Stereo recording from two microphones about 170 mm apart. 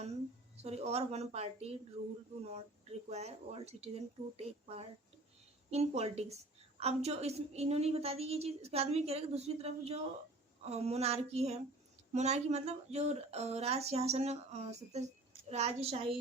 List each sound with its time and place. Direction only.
0.5 s speech: 40° right (ahead or behind)
3.1 s speech: 40° right (ahead or behind)